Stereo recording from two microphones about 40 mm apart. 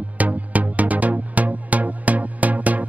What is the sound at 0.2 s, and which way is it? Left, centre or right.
Music, right.